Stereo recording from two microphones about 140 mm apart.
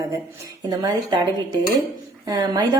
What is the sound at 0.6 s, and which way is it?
Speech, 25° right (ahead or behind).